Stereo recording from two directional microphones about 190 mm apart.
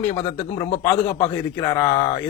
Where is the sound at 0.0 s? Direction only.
15° left (ahead or behind).